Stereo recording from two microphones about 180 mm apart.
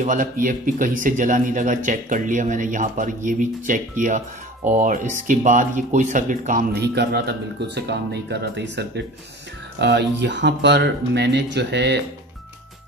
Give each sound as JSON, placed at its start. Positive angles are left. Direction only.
{"t": 0.0, "sound": "a man's voice", "side_deg": -45}
{"t": 7.0, "sound": "speech", "side_deg": -65}